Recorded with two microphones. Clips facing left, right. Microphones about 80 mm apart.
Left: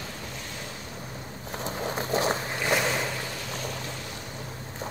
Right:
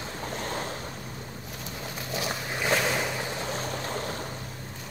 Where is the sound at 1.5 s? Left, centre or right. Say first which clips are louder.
Left 9 dB; left.